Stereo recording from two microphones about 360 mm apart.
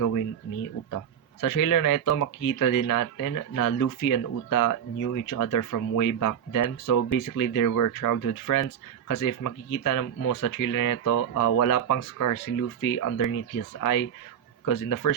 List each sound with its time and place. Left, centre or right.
0.9 s speech: left